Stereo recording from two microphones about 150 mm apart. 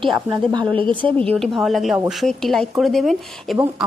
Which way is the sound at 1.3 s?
Centre (ahead or behind).